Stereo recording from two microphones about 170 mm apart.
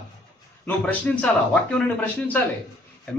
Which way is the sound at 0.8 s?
10° left (ahead or behind).